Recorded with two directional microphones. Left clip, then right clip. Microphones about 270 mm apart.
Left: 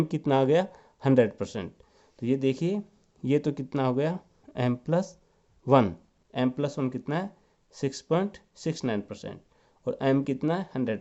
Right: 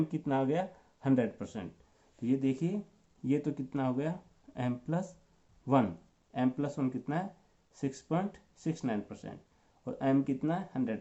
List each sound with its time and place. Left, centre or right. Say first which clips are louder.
0.1 s speech: left 9 dB; left